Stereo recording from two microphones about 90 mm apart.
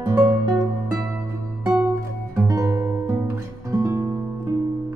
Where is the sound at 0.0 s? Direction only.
30° right (ahead or behind).